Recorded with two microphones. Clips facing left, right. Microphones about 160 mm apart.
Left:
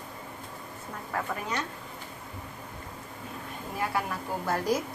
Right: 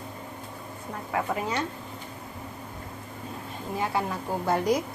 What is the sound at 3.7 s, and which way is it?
Speech, 20° right (ahead or behind).